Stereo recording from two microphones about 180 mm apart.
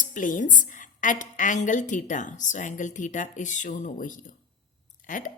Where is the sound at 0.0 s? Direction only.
45° left (ahead or behind).